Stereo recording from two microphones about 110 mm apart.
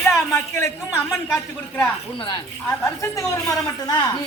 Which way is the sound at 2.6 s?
25° left (ahead or behind).